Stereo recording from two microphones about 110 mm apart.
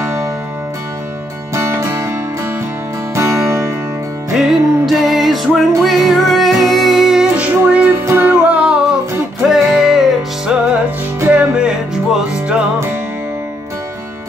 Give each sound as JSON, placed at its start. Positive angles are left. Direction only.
{"t": 0.0, "sound": "music", "side_deg": -25}
{"t": 1.5, "sound": "music", "side_deg": -25}
{"t": 3.2, "sound": "music", "side_deg": -20}
{"t": 4.3, "sound": "music", "side_deg": -5}
{"t": 11.1, "sound": "music", "side_deg": -15}